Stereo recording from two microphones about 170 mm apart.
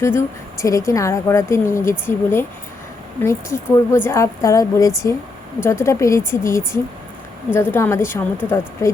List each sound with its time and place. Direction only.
0.0 s a woman's voice: 15° left (ahead or behind)